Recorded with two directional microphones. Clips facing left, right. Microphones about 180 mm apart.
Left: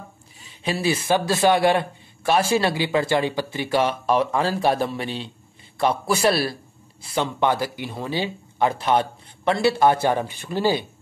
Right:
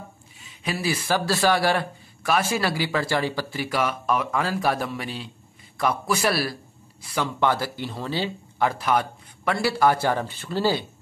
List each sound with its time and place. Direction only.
0.7 s a man's voice: 25° left (ahead or behind)